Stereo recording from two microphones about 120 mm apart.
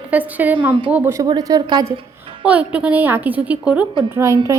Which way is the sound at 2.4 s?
10° right (ahead or behind).